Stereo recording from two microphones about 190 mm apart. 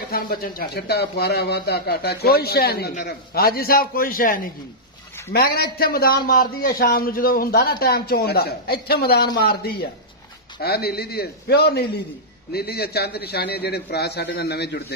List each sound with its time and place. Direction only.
0.1 s a man's voice: 50° left (ahead or behind)